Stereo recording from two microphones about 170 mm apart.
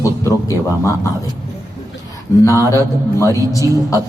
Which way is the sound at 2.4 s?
20° left (ahead or behind).